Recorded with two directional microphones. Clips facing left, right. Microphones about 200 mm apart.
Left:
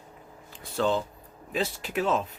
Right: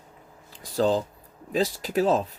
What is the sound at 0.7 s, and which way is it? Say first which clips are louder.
Speech: right 3 dB; 35° right (ahead or behind).